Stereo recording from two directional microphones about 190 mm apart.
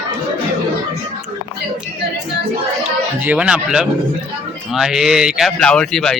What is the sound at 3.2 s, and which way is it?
Speech, 5° right (ahead or behind).